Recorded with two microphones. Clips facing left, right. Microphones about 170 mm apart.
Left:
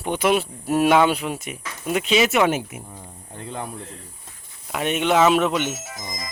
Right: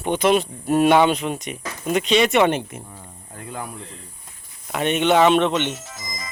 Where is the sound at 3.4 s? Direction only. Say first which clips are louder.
Left 1 dB; 25° left (ahead or behind).